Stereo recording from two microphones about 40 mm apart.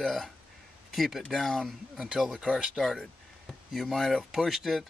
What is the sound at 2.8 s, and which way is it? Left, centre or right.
Speech, centre.